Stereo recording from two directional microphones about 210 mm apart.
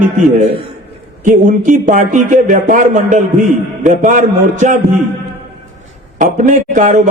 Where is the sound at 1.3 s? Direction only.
35° right (ahead or behind).